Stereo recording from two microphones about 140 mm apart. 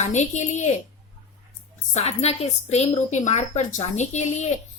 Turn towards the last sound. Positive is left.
turn(degrees=55)  # may be behind; listen again after turning